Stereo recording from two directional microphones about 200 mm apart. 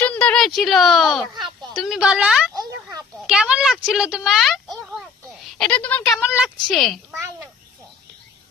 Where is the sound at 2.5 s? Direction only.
20° right (ahead or behind).